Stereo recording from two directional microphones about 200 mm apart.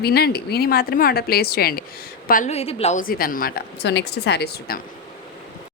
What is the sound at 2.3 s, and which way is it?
A woman's voice, 35° left (ahead or behind).